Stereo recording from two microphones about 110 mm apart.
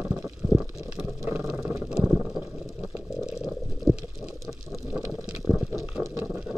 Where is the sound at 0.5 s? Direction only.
15° right (ahead or behind).